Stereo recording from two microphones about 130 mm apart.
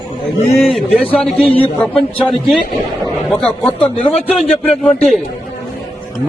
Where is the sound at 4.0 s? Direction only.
50° left (ahead or behind).